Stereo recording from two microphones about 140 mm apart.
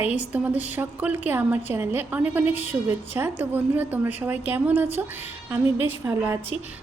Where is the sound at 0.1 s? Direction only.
10° right (ahead or behind).